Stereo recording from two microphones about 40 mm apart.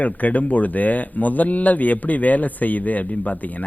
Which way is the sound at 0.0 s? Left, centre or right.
Left.